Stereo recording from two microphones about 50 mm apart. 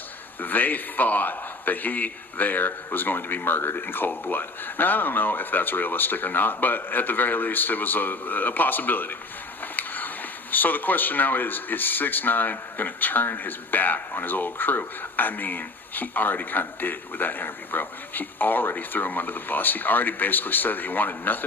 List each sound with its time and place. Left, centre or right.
0.4 s speech: left
9.7 s a sound: left
10.5 s speech: left